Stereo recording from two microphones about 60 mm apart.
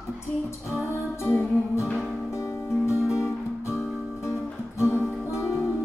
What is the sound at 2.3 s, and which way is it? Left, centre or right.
Music, left.